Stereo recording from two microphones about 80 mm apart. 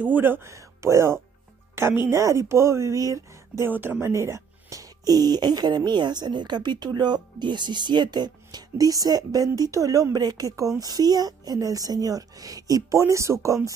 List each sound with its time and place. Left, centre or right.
0.0 s speech: right
3.7 s speech: right